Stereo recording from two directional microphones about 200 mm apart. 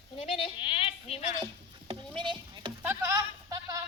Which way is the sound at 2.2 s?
25° right (ahead or behind).